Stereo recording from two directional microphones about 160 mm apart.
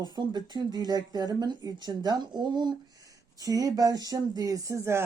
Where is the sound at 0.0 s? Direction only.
25° right (ahead or behind).